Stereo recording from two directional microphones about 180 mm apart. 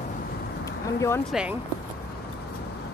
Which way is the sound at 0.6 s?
15° left (ahead or behind).